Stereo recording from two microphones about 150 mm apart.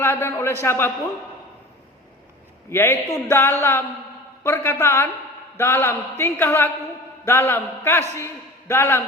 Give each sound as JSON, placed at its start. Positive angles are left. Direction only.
{"t": 0.0, "sound": "a man's voice", "side_deg": 15}
{"t": 2.6, "sound": "a man's voice", "side_deg": 15}